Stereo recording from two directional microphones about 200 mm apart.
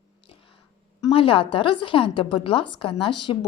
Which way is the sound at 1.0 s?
25° left (ahead or behind).